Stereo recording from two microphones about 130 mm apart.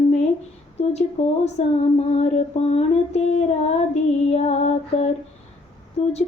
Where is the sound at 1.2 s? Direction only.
55° left (ahead or behind).